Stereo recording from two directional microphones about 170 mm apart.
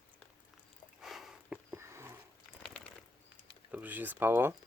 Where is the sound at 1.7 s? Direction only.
15° right (ahead or behind).